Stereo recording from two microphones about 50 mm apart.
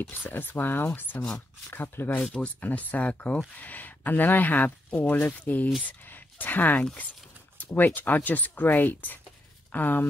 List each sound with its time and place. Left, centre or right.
0.1 s speech: left
2.3 s speech: left
6.8 s speech: left
7.5 s speech: left